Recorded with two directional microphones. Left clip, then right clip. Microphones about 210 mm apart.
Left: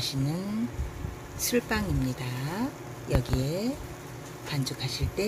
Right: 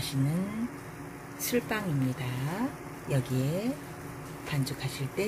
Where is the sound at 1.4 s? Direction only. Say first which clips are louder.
Left 2 dB; 10° left (ahead or behind).